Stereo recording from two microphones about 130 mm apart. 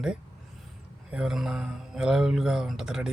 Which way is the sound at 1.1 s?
5° right (ahead or behind).